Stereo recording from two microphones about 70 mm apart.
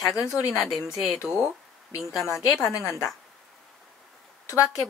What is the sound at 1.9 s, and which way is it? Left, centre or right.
Speech, left.